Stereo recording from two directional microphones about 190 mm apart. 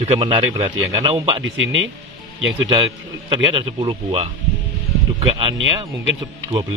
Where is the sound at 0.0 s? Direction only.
30° right (ahead or behind).